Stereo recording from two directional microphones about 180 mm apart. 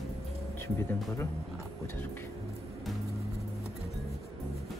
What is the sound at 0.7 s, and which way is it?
Speech, 15° left (ahead or behind).